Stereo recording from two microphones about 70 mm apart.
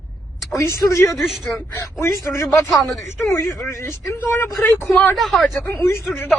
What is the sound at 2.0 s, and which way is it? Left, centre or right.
Speech, left.